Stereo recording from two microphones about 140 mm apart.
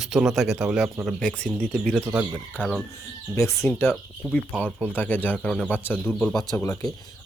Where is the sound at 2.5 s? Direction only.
10° left (ahead or behind).